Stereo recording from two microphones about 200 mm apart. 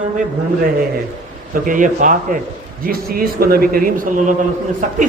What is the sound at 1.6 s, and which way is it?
A man's voice, 40° right (ahead or behind).